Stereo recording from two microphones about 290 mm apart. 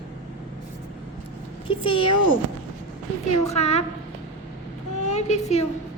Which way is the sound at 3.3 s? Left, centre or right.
Left.